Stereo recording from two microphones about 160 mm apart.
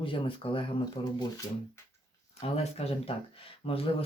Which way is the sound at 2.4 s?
40° left (ahead or behind).